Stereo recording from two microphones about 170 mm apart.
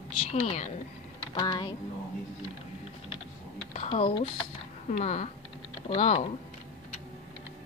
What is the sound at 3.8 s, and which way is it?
Speech, 35° left (ahead or behind).